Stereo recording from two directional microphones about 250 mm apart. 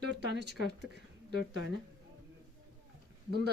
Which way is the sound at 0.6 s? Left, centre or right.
Left.